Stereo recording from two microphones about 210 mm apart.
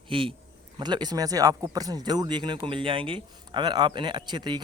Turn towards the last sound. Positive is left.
turn(degrees=-20)  # may be behind; listen again after turning